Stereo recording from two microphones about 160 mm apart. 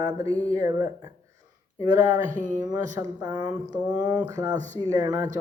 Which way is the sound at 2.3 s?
50° right (ahead or behind).